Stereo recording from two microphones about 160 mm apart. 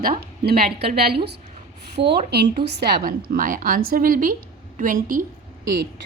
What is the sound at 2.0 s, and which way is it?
Speech, 90° right.